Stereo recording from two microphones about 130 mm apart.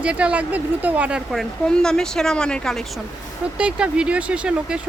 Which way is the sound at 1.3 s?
5° left (ahead or behind).